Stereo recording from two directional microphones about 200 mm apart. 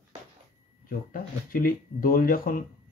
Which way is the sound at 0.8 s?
45° left (ahead or behind).